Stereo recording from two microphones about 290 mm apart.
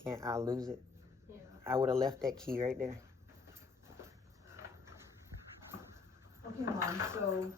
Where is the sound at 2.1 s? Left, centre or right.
Centre.